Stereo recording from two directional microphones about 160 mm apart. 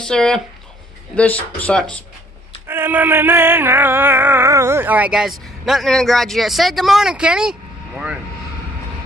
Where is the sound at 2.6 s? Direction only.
15° right (ahead or behind).